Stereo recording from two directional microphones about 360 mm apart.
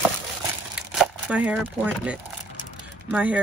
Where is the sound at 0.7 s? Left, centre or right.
Centre.